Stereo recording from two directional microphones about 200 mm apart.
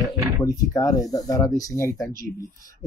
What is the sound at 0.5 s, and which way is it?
Speech, 15° left (ahead or behind).